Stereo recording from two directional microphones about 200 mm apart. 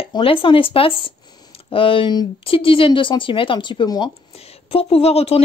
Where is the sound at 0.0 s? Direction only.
25° left (ahead or behind).